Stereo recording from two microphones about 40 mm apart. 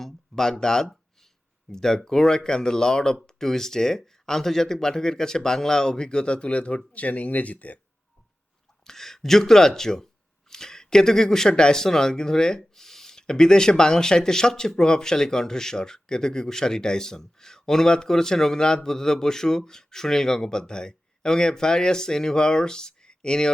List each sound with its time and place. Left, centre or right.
0.0 s a sound: centre
0.6 s speech: centre; by 7.8 s left
8.8 s speech: centre